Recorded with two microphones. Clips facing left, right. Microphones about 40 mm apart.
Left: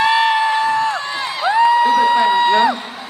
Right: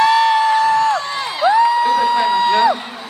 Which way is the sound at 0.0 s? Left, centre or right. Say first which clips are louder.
Right 2 dB; left.